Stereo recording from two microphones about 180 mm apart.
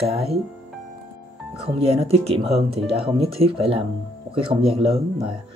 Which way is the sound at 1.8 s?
35° right (ahead or behind).